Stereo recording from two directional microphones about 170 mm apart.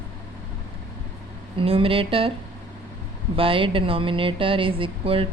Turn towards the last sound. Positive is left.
turn(degrees=-35)  # may be behind; listen again after turning